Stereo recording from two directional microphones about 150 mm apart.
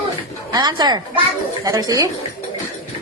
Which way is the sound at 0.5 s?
30° right (ahead or behind).